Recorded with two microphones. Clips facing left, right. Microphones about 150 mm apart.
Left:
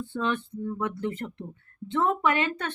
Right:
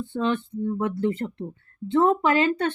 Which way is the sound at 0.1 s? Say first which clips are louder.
Right 4 dB; 30° right (ahead or behind).